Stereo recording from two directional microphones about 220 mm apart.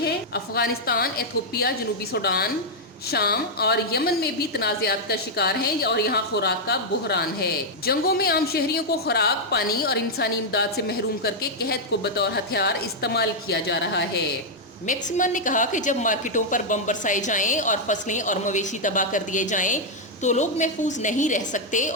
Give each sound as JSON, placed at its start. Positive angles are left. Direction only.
{"t": 0.0, "sound": "a woman's voice", "side_deg": 45}
{"t": 14.8, "sound": "a woman's voice", "side_deg": 35}